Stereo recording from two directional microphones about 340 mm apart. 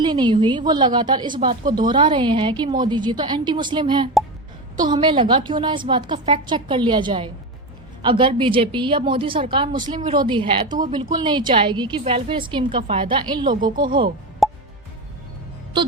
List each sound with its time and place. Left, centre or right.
0.0 s a woman's voice: centre
14.4 s music: centre